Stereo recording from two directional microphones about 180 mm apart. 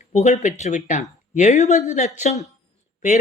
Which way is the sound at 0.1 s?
40° left (ahead or behind).